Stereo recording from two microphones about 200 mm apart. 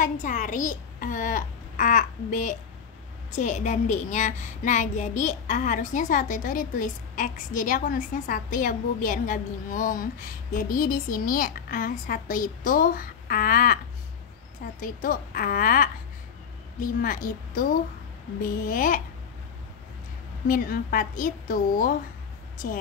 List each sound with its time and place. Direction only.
0.0 s a child's voice: 40° left (ahead or behind)
14.8 s a woman's voice: 45° left (ahead or behind)
20.4 s a woman's voice: 45° left (ahead or behind)